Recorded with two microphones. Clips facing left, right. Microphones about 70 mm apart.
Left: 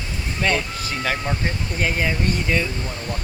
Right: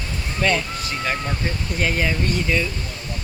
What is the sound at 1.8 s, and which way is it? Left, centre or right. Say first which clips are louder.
Speech: right 1 dB; left.